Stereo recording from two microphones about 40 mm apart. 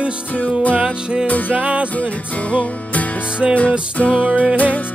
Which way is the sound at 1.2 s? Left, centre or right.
Left.